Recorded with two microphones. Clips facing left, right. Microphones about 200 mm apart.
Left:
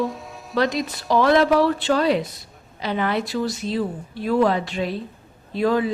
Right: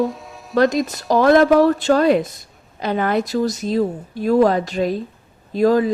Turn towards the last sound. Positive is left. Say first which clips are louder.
# right 5 dB
turn(degrees=-40)  # may be behind; listen again after turning